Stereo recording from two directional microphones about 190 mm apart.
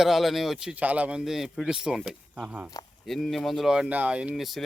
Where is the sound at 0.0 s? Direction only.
Centre (ahead or behind).